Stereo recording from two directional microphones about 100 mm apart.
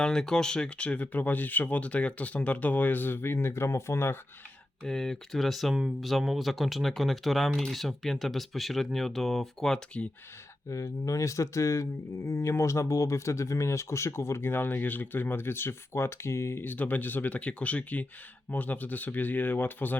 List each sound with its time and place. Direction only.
0.0 s speech: 5° left (ahead or behind); by 4.2 s 25° left (ahead or behind)
4.8 s speech: 5° left (ahead or behind)
10.7 s speech: 35° left (ahead or behind)